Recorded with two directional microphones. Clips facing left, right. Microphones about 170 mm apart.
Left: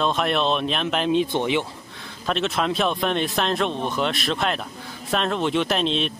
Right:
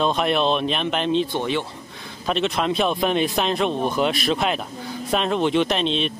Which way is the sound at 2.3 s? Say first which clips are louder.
Right 1 dB; centre (ahead or behind).